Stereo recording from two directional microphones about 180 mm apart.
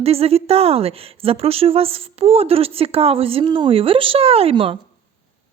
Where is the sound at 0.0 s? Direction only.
35° right (ahead or behind).